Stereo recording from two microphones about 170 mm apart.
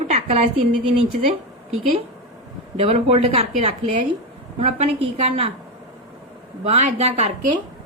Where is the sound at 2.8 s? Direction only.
35° right (ahead or behind).